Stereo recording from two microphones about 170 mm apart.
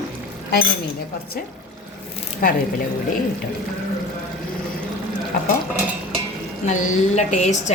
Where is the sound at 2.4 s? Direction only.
60° left (ahead or behind).